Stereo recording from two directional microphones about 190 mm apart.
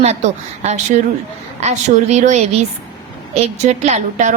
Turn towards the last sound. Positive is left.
turn(degrees=-40)  # may be behind; listen again after turning